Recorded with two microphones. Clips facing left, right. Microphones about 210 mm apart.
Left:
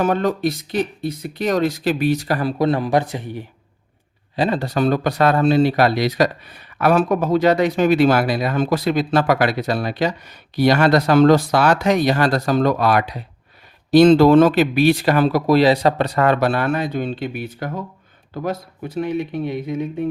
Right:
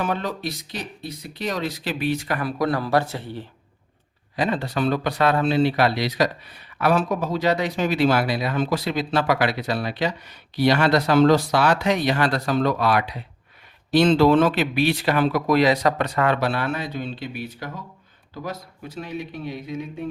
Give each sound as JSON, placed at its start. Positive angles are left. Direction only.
{"t": 0.0, "sound": "speech", "side_deg": 50}
{"t": 4.4, "sound": "a man's voice", "side_deg": 35}